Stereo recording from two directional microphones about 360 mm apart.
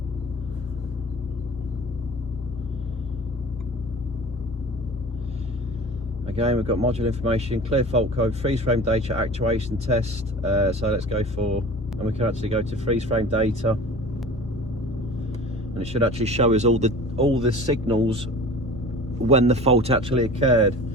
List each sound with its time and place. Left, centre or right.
6.2 s speech: centre
15.7 s speech: centre
19.3 s speech: centre